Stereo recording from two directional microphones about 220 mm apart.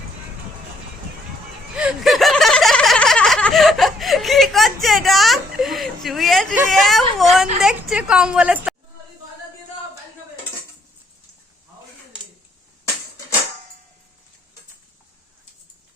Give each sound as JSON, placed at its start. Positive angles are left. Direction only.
{"t": 1.7, "sound": "snicker", "side_deg": -5}
{"t": 6.7, "sound": "a woman's voice", "side_deg": 0}